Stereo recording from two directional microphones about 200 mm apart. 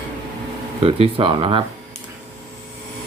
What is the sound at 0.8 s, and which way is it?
Speech, 30° right (ahead or behind).